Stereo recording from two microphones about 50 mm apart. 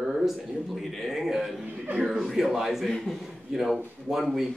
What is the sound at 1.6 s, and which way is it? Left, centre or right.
Speech, right.